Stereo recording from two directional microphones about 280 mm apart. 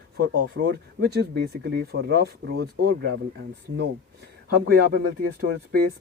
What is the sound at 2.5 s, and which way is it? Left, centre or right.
Speech, right.